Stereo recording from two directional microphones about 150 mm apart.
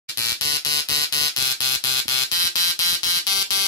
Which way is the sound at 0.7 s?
25° left (ahead or behind).